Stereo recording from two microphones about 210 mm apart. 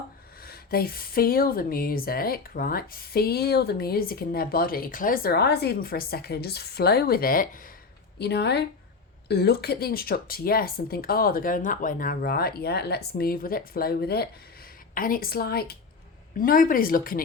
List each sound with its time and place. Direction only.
0.4 s speech: 45° left (ahead or behind)
8.2 s speech: 50° left (ahead or behind)